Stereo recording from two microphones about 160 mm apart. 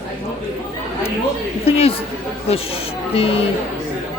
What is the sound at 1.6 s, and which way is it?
Speech, 40° left (ahead or behind).